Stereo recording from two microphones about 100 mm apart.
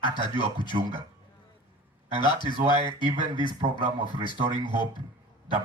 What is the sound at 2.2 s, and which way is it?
Speech, 50° left (ahead or behind).